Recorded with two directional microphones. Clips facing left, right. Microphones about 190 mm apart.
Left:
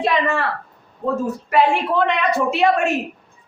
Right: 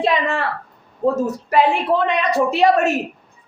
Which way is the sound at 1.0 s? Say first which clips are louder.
Right 3 dB; 40° right (ahead or behind).